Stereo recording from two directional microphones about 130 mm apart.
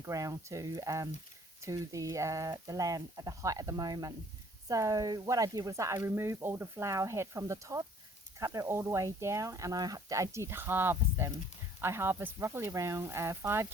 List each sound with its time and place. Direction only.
0.0 s speech: 25° right (ahead or behind)